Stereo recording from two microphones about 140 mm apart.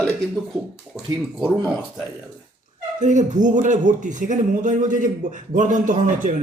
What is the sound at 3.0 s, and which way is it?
A man's voice, 60° right (ahead or behind).